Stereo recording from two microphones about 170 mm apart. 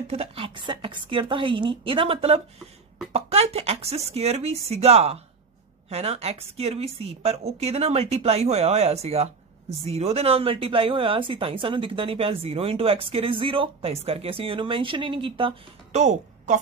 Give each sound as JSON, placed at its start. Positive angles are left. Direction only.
{"t": 0.1, "sound": "a woman's voice", "side_deg": -35}
{"t": 16.0, "sound": "a woman's voice", "side_deg": -45}